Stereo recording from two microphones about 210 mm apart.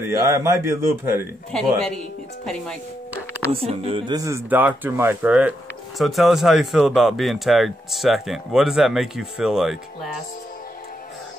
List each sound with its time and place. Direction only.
0.0 s a man's voice: 15° right (ahead or behind)
1.5 s speech: 5° left (ahead or behind)
3.1 s music: 10° right (ahead or behind)
3.5 s speech: 30° right (ahead or behind)
4.2 s speech: 10° right (ahead or behind)